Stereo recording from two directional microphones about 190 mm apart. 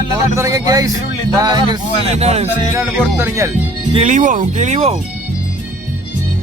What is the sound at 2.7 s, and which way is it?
Speech, 15° right (ahead or behind).